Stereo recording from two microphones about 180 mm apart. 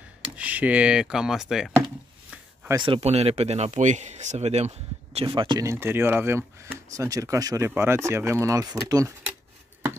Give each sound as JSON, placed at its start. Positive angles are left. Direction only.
{"t": 0.4, "sound": "speech", "side_deg": -10}
{"t": 2.7, "sound": "speech", "side_deg": -25}